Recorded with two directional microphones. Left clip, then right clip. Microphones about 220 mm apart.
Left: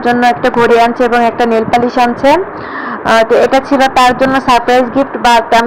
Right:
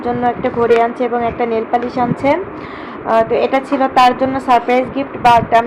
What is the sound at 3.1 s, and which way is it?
Speech, 20° left (ahead or behind).